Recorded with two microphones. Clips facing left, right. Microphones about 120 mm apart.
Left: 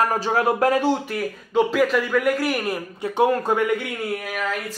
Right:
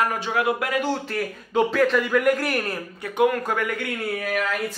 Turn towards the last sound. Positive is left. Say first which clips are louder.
# left 2 dB
turn(degrees=25)  # may be behind; listen again after turning